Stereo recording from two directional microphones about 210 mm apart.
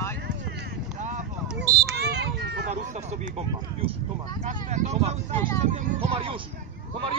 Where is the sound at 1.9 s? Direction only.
50° right (ahead or behind).